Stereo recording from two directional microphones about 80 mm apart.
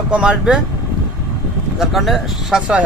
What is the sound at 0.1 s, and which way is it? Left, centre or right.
Speech, centre.